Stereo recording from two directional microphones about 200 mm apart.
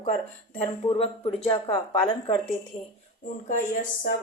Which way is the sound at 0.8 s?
30° left (ahead or behind).